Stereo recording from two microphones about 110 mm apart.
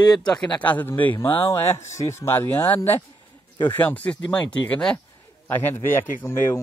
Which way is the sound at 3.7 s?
15° left (ahead or behind).